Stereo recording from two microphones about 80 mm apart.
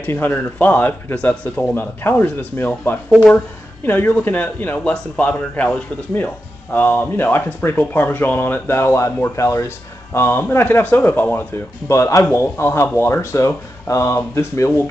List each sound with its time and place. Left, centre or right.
0.0 s speech: left
4.9 s speech: centre
11.5 s speech: left